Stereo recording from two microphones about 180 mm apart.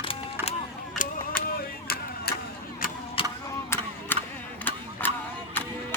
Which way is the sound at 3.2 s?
30° left (ahead or behind).